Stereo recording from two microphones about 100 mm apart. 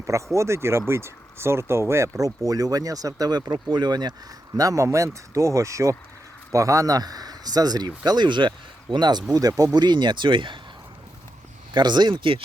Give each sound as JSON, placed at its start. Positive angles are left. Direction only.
{"t": 0.0, "sound": "speech", "side_deg": -30}
{"t": 4.5, "sound": "speech", "side_deg": -35}
{"t": 9.7, "sound": "speech", "side_deg": -50}
{"t": 11.7, "sound": "speech", "side_deg": -45}